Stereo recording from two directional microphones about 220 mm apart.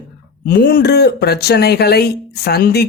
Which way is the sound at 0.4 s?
40° left (ahead or behind).